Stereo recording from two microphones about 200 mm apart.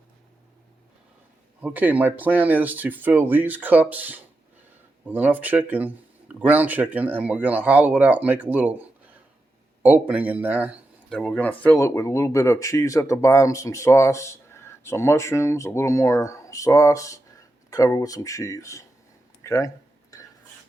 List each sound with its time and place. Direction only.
1.6 s speech: 10° right (ahead or behind)
9.8 s speech: 5° right (ahead or behind)
11.1 s speech: 5° left (ahead or behind)
19.4 s a sound: 15° left (ahead or behind)